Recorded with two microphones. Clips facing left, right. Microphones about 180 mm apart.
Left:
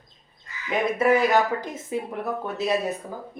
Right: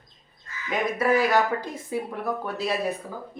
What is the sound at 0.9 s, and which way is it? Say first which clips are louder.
Speech: left 2 dB; 25° left (ahead or behind).